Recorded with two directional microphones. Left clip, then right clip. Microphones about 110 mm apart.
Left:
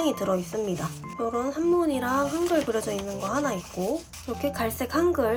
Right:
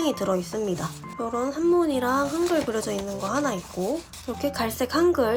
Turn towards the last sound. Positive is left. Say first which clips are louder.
# right 2 dB
turn(degrees=-15)  # may be behind; listen again after turning